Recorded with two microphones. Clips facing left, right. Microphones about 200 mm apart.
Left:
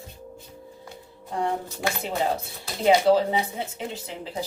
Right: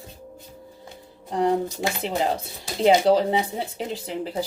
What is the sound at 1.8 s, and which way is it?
Speech, 30° right (ahead or behind).